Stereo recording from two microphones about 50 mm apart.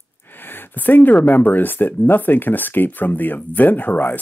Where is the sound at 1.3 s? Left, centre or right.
Left.